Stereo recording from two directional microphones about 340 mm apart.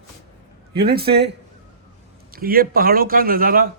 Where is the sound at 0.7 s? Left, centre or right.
Right.